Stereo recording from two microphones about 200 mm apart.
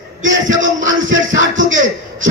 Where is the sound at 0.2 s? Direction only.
70° right (ahead or behind).